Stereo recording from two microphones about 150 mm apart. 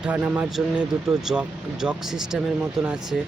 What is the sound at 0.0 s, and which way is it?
Speech, 10° right (ahead or behind).